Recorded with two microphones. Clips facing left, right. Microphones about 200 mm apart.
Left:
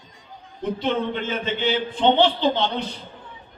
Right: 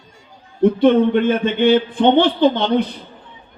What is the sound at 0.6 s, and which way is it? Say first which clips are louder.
A man's voice: right 12 dB; 55° right (ahead or behind).